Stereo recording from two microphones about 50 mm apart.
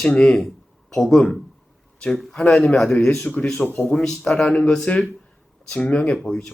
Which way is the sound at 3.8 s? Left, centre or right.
Centre.